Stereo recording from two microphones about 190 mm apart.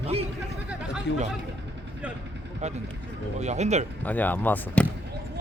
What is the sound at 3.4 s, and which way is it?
Speech, 35° right (ahead or behind).